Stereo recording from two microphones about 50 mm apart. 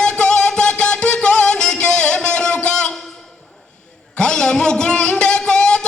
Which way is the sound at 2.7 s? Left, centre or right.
Centre.